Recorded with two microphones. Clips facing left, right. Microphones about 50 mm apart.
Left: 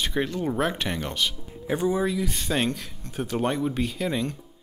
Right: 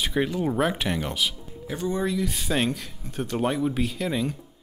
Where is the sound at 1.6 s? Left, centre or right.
Centre.